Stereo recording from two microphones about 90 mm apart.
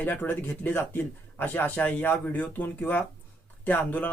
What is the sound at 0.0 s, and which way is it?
Speech, 20° left (ahead or behind).